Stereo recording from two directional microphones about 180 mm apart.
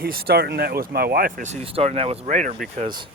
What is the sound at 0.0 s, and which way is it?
Speech, 60° right (ahead or behind).